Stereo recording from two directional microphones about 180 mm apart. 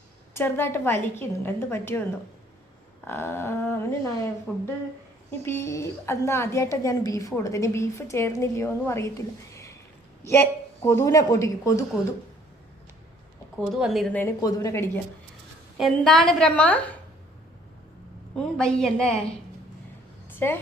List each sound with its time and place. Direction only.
0.3 s a woman's voice: 10° left (ahead or behind)
13.6 s a woman's voice: centre (ahead or behind); by 15.0 s 15° left (ahead or behind)
15.8 s a woman's voice: centre (ahead or behind)
18.3 s a woman's voice: 5° left (ahead or behind)
20.4 s a woman's voice: 10° left (ahead or behind)